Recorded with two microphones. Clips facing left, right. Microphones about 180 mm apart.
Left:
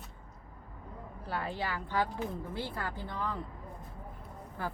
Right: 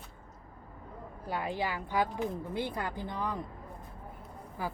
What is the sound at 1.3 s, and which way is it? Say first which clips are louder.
Speech: right 2 dB; 15° right (ahead or behind).